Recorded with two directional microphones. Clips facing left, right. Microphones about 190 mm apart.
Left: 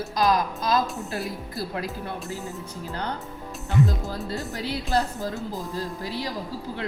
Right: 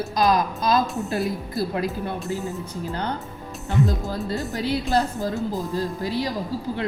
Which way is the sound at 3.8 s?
Centre (ahead or behind).